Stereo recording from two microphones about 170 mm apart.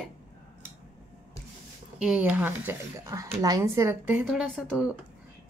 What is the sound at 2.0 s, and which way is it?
Speech, 5° right (ahead or behind).